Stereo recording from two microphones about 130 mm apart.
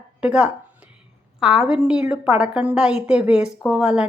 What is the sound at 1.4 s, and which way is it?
A woman's voice, 5° right (ahead or behind).